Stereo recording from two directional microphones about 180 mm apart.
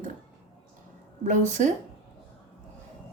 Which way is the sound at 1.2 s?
45° right (ahead or behind).